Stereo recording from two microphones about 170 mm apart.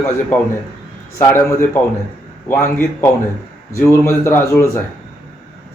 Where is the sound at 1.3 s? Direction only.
15° left (ahead or behind).